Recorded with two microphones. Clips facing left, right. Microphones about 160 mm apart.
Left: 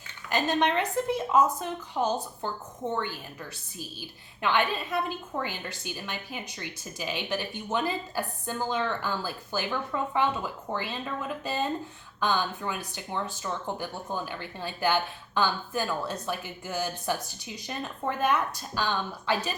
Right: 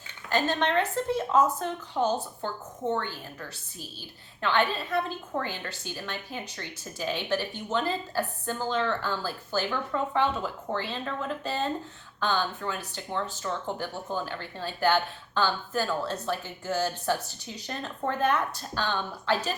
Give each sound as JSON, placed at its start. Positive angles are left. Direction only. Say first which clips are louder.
{"t": 0.3, "sound": "a woman's voice", "louder": "even", "side_deg": 15}
{"t": 4.4, "sound": "a woman's voice", "louder": "even", "side_deg": 15}